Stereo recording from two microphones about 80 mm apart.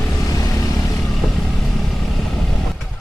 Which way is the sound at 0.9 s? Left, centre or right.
Centre.